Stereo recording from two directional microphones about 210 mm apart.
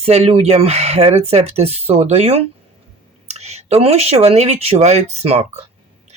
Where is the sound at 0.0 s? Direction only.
30° right (ahead or behind).